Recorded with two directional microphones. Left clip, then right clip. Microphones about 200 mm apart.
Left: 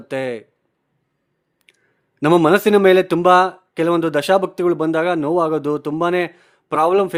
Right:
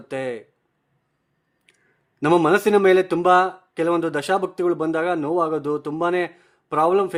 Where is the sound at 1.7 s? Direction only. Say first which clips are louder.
Left 4 dB; 25° left (ahead or behind).